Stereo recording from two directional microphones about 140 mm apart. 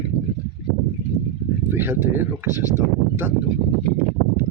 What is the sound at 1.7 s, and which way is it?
Speech, 15° right (ahead or behind).